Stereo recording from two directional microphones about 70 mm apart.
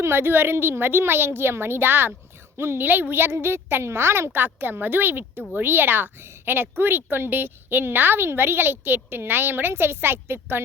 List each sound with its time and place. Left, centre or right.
0.0 s a woman's voice: right